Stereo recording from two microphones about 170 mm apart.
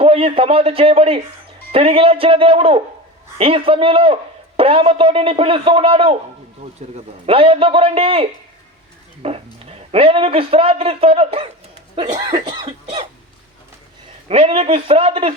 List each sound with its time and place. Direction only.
0.0 s a man's voice: 35° right (ahead or behind)
14.3 s a man's voice: 35° right (ahead or behind)